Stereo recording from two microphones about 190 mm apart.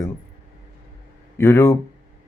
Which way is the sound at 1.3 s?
15° left (ahead or behind).